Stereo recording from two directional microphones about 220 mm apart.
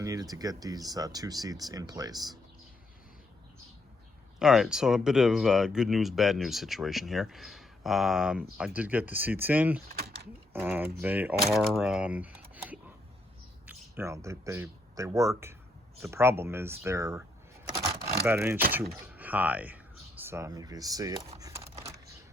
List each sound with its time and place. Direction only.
0.0 s speech: 15° right (ahead or behind)
4.4 s speech: centre (ahead or behind)
18.3 s speech: 10° right (ahead or behind)
18.7 s a sound: 10° right (ahead or behind)